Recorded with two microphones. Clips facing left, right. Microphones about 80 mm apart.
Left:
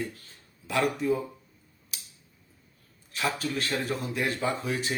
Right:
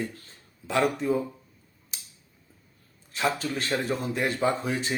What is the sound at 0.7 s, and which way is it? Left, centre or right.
Speech, right.